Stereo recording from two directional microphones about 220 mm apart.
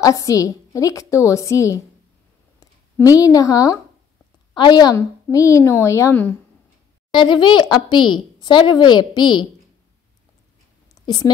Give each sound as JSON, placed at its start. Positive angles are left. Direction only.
{"t": 0.0, "sound": "a woman's voice", "side_deg": 15}
{"t": 7.1, "sound": "speech", "side_deg": 20}
{"t": 11.1, "sound": "speech", "side_deg": 20}